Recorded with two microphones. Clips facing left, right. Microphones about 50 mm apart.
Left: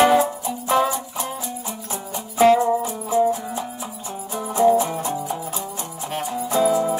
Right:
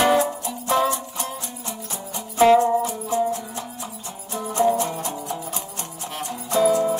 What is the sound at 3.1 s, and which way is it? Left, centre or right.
Music, centre.